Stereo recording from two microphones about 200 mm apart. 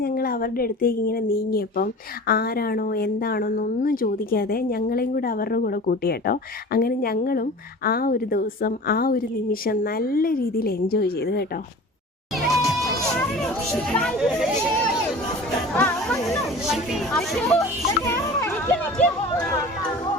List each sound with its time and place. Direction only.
0.0 s a woman's voice: 50° left (ahead or behind)
12.5 s music: centre (ahead or behind)
13.1 s speech: 5° left (ahead or behind)
15.7 s music: 5° left (ahead or behind)
16.6 s speech: centre (ahead or behind)
17.6 s music: 15° left (ahead or behind)